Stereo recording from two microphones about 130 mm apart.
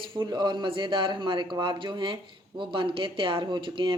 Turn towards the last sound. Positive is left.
turn(degrees=-40)  # may be behind; listen again after turning